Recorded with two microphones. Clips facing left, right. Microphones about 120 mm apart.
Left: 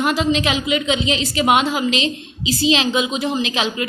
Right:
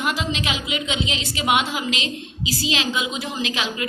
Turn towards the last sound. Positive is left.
turn(degrees=25)  # may be behind; listen again after turning